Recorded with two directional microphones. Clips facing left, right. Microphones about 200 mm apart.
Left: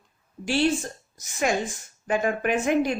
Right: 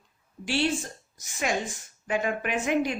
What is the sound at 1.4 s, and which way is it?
Speech, 45° left (ahead or behind).